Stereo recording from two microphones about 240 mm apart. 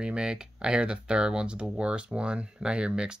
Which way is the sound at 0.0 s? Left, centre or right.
Centre.